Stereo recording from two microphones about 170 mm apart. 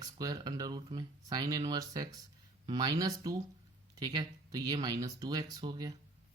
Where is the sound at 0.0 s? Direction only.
20° right (ahead or behind).